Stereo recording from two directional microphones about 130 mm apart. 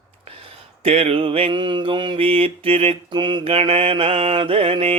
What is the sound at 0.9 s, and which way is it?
Mantra, 50° right (ahead or behind).